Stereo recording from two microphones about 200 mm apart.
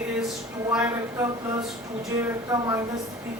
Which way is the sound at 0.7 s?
5° right (ahead or behind).